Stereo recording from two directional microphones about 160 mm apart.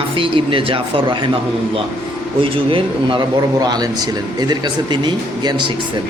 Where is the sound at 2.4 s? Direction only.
35° right (ahead or behind).